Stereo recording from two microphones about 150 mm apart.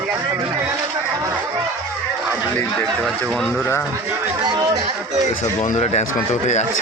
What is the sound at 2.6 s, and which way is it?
Speech, 5° left (ahead or behind).